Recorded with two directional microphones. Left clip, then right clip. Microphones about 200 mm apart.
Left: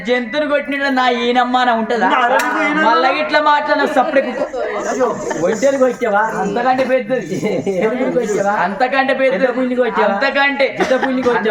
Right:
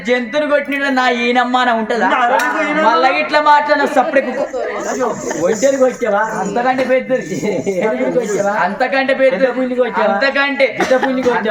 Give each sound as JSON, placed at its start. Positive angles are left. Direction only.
{"t": 0.1, "sound": "a man's voice", "side_deg": -15}
{"t": 2.0, "sound": "speech", "side_deg": 5}
{"t": 2.8, "sound": "a man's voice", "side_deg": -15}
{"t": 5.4, "sound": "speech", "side_deg": 10}
{"t": 6.6, "sound": "a man's voice", "side_deg": -20}
{"t": 8.6, "sound": "a man's voice", "side_deg": -10}